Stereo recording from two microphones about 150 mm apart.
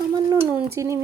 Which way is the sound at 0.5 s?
20° right (ahead or behind).